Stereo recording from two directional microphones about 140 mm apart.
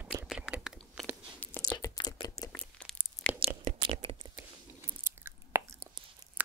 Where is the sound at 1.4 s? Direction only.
10° left (ahead or behind).